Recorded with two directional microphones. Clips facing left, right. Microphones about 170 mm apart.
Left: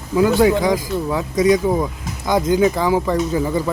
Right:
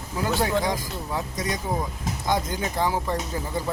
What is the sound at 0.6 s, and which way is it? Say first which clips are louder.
Speech: left 9 dB; 90° left.